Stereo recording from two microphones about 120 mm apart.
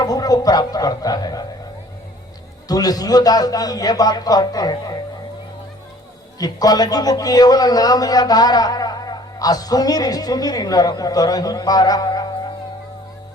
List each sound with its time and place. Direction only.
0.0 s a man's voice: 30° left (ahead or behind)
2.6 s a man's voice: 30° left (ahead or behind)
6.4 s a man's voice: 30° left (ahead or behind)